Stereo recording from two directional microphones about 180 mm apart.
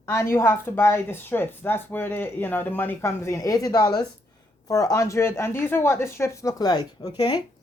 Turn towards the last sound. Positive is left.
turn(degrees=20)  # may be behind; listen again after turning